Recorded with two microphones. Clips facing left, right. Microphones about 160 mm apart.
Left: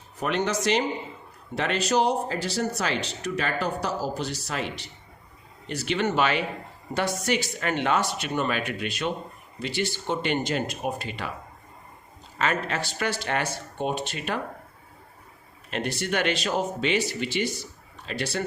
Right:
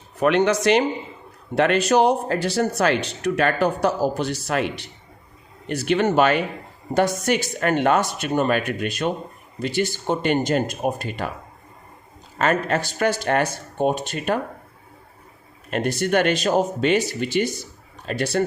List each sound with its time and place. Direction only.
0.2 s speech: 65° right (ahead or behind); by 11.3 s 45° right (ahead or behind)
12.4 s speech: 45° right (ahead or behind)
15.7 s speech: 45° right (ahead or behind)